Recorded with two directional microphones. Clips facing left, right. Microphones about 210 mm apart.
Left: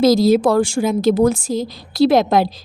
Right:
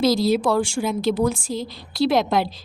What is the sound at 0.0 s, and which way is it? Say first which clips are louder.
A woman's voice: left 6 dB; 40° left (ahead or behind).